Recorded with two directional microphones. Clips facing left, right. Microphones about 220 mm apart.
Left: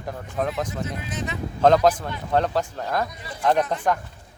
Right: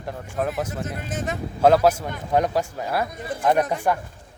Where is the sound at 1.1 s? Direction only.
50° right (ahead or behind).